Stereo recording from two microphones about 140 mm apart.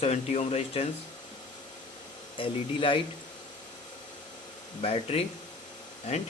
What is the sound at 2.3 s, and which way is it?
Speech, 40° left (ahead or behind).